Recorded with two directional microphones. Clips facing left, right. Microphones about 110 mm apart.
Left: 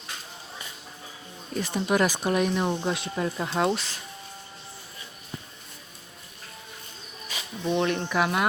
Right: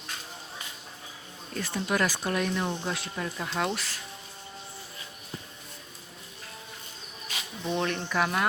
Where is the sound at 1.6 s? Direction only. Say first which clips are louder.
Left 4 dB; 15° left (ahead or behind).